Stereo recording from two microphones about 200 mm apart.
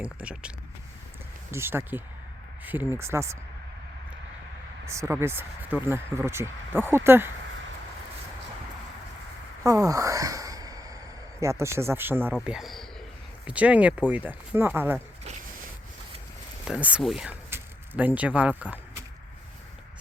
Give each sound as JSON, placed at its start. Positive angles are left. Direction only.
{"t": 0.0, "sound": "speech", "side_deg": -5}
{"t": 4.9, "sound": "speech", "side_deg": -15}
{"t": 9.6, "sound": "a sound", "side_deg": -15}
{"t": 11.3, "sound": "speech", "side_deg": -15}
{"t": 16.6, "sound": "speech", "side_deg": -5}